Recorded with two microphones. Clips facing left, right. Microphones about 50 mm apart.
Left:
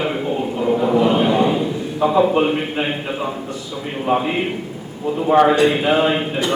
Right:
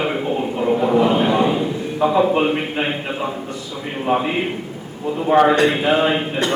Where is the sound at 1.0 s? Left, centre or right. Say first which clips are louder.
Left 1 dB; centre.